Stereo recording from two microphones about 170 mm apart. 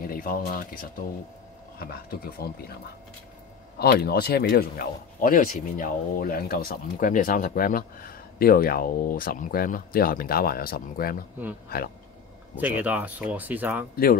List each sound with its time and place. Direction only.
0.0 s speech: 60° left (ahead or behind)
3.8 s speech: 70° left (ahead or behind)
12.5 s speech: 10° right (ahead or behind)